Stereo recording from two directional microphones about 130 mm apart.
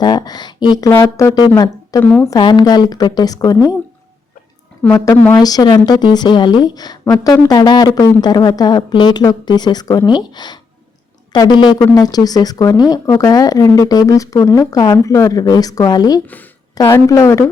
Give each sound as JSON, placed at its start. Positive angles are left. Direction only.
{"t": 0.0, "sound": "a woman's voice", "side_deg": 30}
{"t": 2.0, "sound": "speech", "side_deg": 10}
{"t": 2.4, "sound": "a woman's voice", "side_deg": 35}
{"t": 4.9, "sound": "a woman's voice", "side_deg": 25}
{"t": 16.2, "sound": "speech", "side_deg": 15}
{"t": 16.7, "sound": "a woman's voice", "side_deg": 25}